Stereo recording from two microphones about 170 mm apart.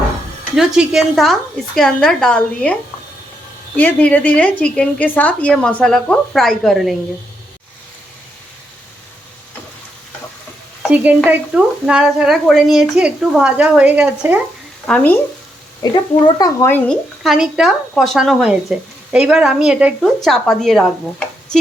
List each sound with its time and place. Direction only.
0.5 s frying: 5° right (ahead or behind)
3.8 s a woman's voice: 10° left (ahead or behind)
10.9 s frying: 10° right (ahead or behind)
14.8 s frying: 5° left (ahead or behind)
15.8 s a child's voice: 25° left (ahead or behind)
17.2 s frying: centre (ahead or behind)